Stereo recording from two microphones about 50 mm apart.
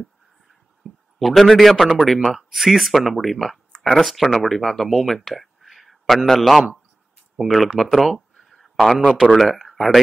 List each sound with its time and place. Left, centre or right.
0.0 s a sound: centre
2.2 s a man's voice: centre
9.0 s a man's voice: centre
9.4 s speech: centre